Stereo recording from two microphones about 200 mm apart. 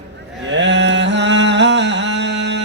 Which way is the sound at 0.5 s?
60° right (ahead or behind).